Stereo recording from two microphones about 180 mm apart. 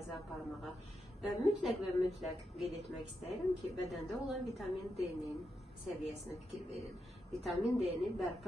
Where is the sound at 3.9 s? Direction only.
Centre (ahead or behind).